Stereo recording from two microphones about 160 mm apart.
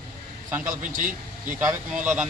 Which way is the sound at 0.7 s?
55° right (ahead or behind).